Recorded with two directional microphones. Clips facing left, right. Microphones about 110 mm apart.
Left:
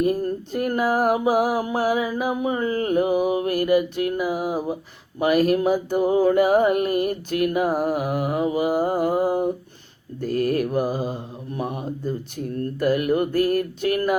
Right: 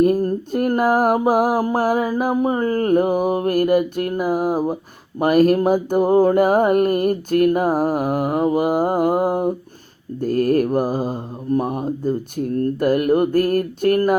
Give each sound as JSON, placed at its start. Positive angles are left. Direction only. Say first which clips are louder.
{"t": 0.0, "sound": "mantra", "louder": "right 5 dB", "side_deg": -45}